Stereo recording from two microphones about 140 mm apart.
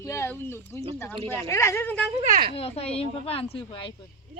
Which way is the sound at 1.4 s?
20° left (ahead or behind).